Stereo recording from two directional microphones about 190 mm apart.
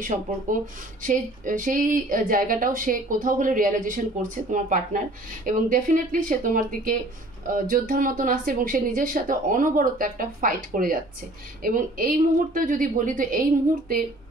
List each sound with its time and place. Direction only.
0.5 s speech: 45° right (ahead or behind)